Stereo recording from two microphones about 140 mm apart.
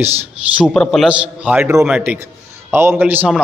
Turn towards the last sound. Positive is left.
turn(degrees=-15)  # may be behind; listen again after turning